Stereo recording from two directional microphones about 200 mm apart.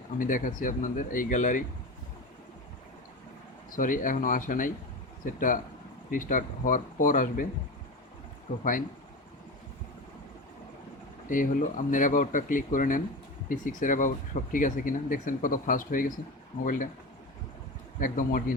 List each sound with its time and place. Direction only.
0.2 s speech: 40° left (ahead or behind)
3.8 s speech: 40° left (ahead or behind)
8.5 s speech: 35° left (ahead or behind)
11.3 s speech: 40° left (ahead or behind)
18.0 s speech: 45° left (ahead or behind)